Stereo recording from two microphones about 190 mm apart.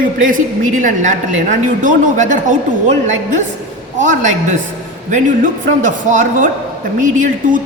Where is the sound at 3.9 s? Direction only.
40° right (ahead or behind).